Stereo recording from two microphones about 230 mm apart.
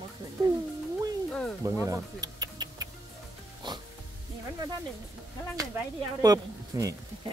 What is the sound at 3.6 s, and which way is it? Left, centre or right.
Music, centre.